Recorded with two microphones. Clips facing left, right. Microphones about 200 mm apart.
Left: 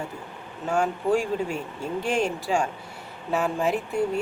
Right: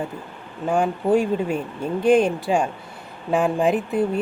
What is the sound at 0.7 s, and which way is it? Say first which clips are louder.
Speech: right 4 dB; 20° right (ahead or behind).